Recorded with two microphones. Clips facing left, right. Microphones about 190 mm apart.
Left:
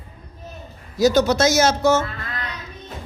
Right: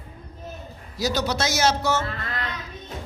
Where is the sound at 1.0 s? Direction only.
50° left (ahead or behind).